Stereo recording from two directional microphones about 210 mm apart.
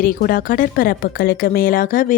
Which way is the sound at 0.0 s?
45° left (ahead or behind).